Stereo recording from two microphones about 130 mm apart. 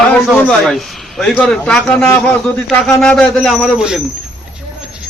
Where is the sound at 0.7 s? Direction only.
Centre (ahead or behind).